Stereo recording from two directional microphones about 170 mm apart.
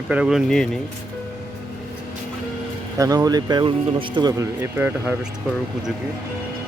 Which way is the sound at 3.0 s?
20° right (ahead or behind).